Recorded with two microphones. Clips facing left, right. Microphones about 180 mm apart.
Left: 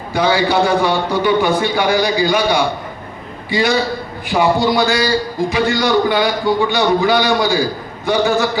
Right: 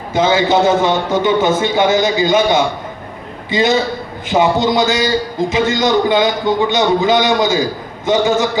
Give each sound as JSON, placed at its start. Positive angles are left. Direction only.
{"t": 0.1, "sound": "a man's voice", "side_deg": -20}